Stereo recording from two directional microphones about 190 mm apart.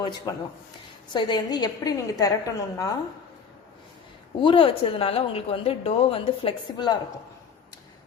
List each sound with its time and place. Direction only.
0.0 s a woman's voice: 20° left (ahead or behind)
4.4 s a woman's voice: 30° left (ahead or behind)